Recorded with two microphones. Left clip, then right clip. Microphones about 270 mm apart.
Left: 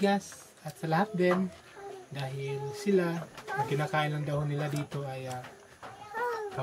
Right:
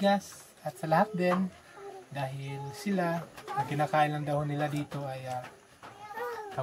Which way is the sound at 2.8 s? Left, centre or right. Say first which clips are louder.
Left 2 dB; right.